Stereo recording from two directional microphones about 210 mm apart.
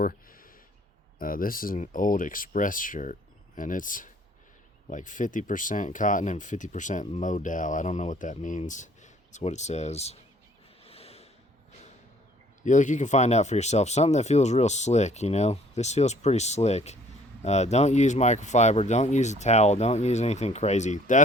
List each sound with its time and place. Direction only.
0.0 s a sound: 45° left (ahead or behind)
1.2 s speech: 40° left (ahead or behind)
10.8 s snort: 30° left (ahead or behind)
12.6 s speech: 35° left (ahead or behind)